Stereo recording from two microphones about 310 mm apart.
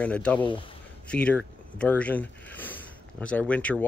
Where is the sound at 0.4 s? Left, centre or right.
Centre.